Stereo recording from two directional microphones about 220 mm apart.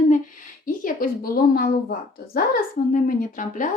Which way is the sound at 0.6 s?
40° left (ahead or behind).